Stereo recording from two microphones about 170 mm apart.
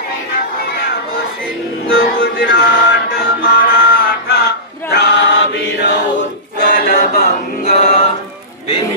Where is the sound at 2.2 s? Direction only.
65° left (ahead or behind).